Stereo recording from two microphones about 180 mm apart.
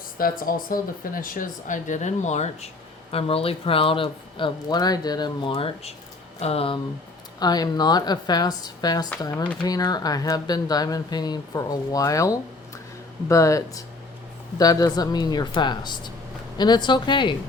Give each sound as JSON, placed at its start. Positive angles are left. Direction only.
{"t": 0.2, "sound": "speech", "side_deg": 50}
{"t": 7.3, "sound": "speech", "side_deg": 20}